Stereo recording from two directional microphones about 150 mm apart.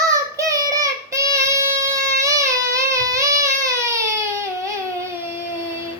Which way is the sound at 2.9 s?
20° right (ahead or behind).